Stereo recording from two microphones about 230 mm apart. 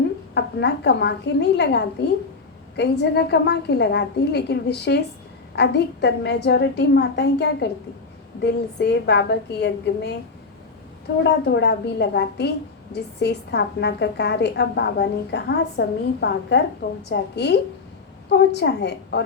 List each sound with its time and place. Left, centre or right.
0.3 s a woman's voice: left
11.2 s a woman's voice: left